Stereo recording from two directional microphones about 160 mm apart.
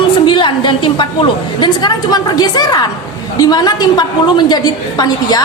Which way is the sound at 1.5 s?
25° left (ahead or behind).